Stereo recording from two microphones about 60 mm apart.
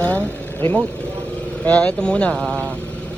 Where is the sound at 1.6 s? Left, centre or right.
Left.